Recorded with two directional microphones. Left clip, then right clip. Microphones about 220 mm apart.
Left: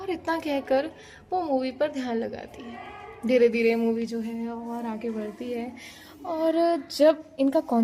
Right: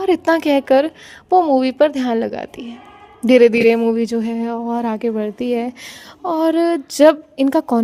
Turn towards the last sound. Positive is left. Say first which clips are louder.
# right 7 dB
turn(degrees=-45)  # may be behind; listen again after turning